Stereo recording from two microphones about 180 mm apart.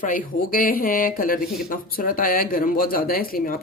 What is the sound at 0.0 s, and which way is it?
Speech, 50° left (ahead or behind).